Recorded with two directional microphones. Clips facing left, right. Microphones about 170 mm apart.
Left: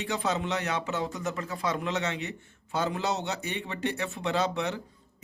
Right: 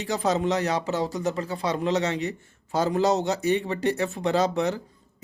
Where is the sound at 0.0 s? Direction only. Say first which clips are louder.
Right 5 dB; 40° right (ahead or behind).